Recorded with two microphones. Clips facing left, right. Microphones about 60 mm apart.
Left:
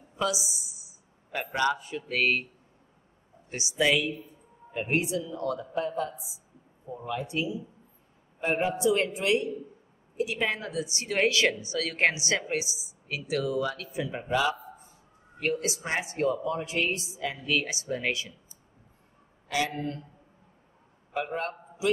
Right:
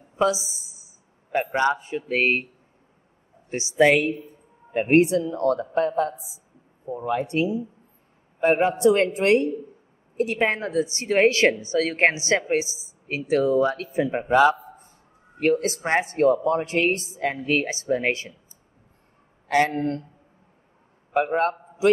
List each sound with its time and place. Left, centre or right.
0.1 s a woman's voice: right
3.4 s a woman's voice: right
19.4 s speech: right
21.1 s a man's voice: right